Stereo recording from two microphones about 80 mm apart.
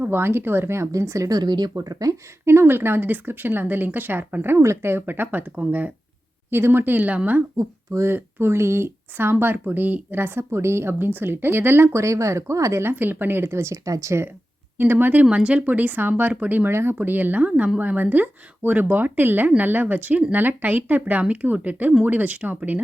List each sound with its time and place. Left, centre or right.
0.0 s speech: right
1.4 s speech: right
1.7 s speech: right
2.4 s speech: right
7.5 s speech: right
8.0 s speech: right
12.8 s speech: right
14.8 s speech: right